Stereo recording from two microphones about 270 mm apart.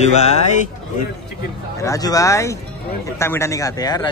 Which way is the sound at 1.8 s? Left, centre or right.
Centre.